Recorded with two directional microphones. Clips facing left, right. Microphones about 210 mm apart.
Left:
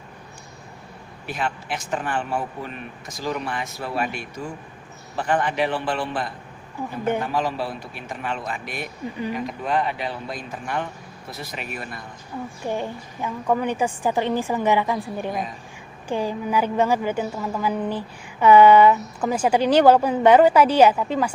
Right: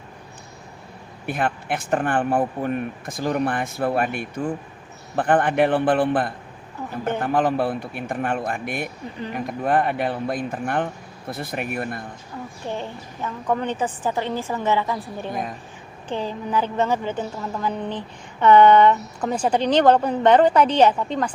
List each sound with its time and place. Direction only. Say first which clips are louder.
1.3 s speech: right 4 dB; 55° right (ahead or behind)
12.6 s a woman's voice: left 3 dB; 10° left (ahead or behind)